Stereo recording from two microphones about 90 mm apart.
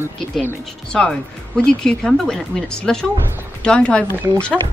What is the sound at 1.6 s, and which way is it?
Speech, 10° left (ahead or behind).